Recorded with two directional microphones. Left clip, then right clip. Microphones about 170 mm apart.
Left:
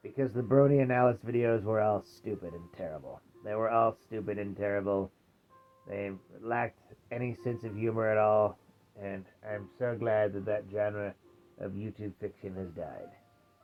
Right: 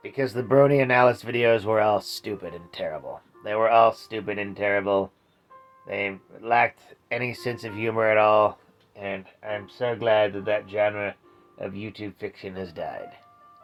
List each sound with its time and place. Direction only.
0.2 s speech: 20° right (ahead or behind)
12.4 s speech: 15° right (ahead or behind)